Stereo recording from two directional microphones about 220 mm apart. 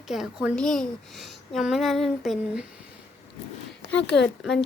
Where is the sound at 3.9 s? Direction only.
50° left (ahead or behind).